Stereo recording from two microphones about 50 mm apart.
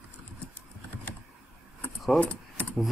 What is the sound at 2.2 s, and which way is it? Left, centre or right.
Keys jangling, left.